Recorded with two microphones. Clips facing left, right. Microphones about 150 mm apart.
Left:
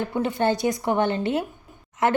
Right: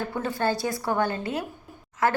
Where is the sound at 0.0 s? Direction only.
20° left (ahead or behind).